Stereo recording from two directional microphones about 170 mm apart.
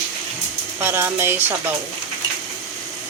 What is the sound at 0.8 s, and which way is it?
Speech, 15° right (ahead or behind).